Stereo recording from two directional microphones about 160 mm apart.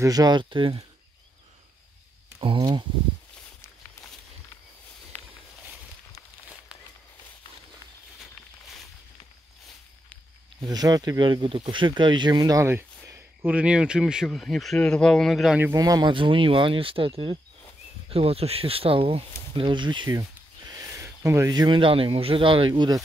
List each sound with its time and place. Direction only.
0.0 s speech: 25° right (ahead or behind)
2.4 s speech: 30° right (ahead or behind)
5.1 s a sound: 10° left (ahead or behind)
8.2 s a sound: centre (ahead or behind)
10.6 s speech: 25° right (ahead or behind); by 15.6 s centre (ahead or behind)
15.6 s speech: 20° right (ahead or behind)
18.1 s speech: 35° right (ahead or behind)